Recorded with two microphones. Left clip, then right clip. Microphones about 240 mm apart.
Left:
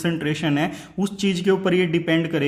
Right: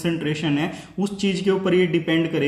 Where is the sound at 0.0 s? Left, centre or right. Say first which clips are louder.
Even; left.